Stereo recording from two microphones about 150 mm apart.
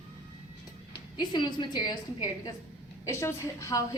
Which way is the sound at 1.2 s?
30° left (ahead or behind).